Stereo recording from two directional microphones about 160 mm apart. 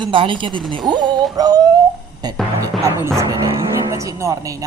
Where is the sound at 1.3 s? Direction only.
25° right (ahead or behind).